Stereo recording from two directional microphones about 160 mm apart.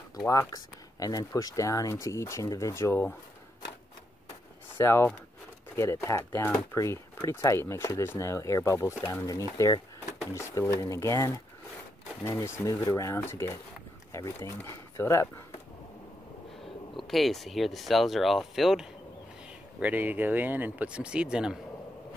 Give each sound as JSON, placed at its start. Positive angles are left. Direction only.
{"t": 0.3, "sound": "speech", "side_deg": 20}
{"t": 4.7, "sound": "speech", "side_deg": 15}
{"t": 16.9, "sound": "speech", "side_deg": 0}